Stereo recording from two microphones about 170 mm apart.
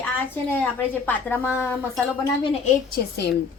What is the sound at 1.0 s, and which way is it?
Speech, 10° left (ahead or behind).